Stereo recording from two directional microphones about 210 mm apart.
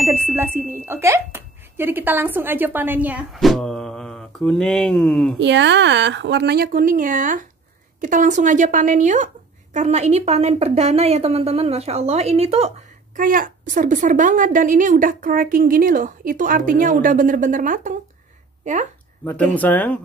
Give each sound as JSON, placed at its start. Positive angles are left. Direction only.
{"t": 0.0, "sound": "speech", "side_deg": -10}
{"t": 5.4, "sound": "a woman's voice", "side_deg": -60}
{"t": 19.5, "sound": "speech", "side_deg": 10}